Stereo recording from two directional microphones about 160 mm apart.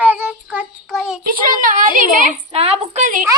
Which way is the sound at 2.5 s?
40° right (ahead or behind).